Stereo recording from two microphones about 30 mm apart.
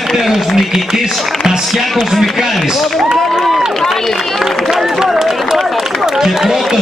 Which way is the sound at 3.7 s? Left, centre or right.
Centre.